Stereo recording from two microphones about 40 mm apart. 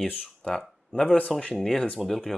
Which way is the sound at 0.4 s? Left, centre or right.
Left.